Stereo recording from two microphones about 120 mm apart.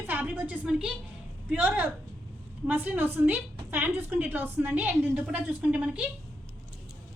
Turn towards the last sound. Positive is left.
turn(degrees=-10)  # may be behind; listen again after turning